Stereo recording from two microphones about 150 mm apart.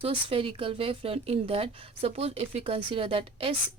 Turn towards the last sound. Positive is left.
turn(degrees=-40)  # may be behind; listen again after turning